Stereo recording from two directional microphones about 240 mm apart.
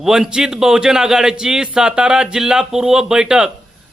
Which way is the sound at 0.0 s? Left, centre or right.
Centre.